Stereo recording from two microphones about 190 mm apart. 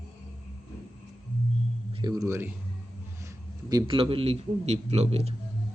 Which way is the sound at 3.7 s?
25° right (ahead or behind).